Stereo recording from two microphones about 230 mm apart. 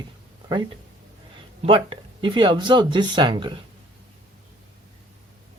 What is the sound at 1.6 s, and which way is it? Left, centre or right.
Speech, right.